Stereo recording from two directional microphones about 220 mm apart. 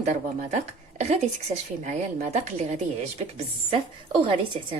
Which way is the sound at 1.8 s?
35° right (ahead or behind).